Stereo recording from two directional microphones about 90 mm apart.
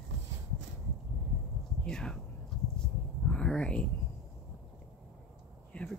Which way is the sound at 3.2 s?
10° left (ahead or behind).